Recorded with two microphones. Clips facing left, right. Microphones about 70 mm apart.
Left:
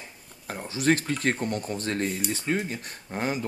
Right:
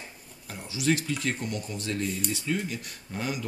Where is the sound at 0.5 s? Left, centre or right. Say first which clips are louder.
Left 3 dB; left.